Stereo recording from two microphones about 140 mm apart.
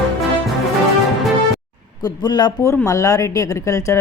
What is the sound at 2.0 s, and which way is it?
Speech, 30° left (ahead or behind).